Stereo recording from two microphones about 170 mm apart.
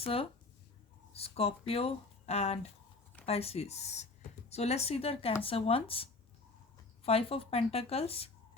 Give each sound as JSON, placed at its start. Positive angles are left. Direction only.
{"t": 0.0, "sound": "speech", "side_deg": 35}